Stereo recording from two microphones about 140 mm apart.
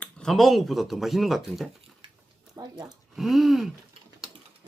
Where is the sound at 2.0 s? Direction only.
40° right (ahead or behind).